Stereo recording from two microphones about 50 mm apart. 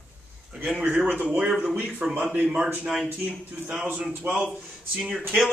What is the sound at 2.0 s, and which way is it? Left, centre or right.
Speech, centre.